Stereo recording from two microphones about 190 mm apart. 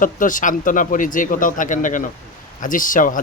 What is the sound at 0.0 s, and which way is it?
Speech, 45° left (ahead or behind).